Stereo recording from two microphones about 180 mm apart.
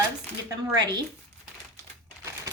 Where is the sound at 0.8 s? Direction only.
25° right (ahead or behind).